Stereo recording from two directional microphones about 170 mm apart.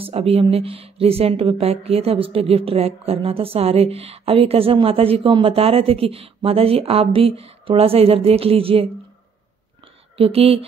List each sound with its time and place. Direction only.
0.0 s speech: 35° right (ahead or behind)
10.1 s speech: 35° right (ahead or behind)